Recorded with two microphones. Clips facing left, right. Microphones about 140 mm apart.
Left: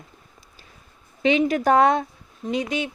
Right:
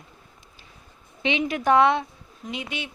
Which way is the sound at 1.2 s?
40° left (ahead or behind).